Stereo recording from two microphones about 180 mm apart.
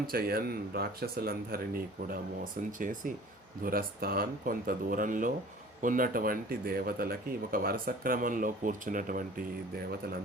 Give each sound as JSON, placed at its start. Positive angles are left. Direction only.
{"t": 0.1, "sound": "a man's voice", "side_deg": -55}